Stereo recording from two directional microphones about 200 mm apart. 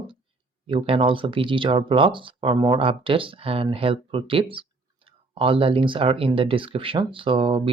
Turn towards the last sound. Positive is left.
turn(degrees=-25)  # may be behind; listen again after turning